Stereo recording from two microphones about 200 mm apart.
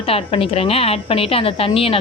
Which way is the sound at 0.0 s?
30° left (ahead or behind).